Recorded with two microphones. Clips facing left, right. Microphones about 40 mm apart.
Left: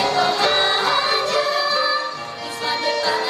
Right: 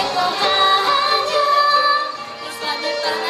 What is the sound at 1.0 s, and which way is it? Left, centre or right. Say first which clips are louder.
Yodeling: right 2 dB; right.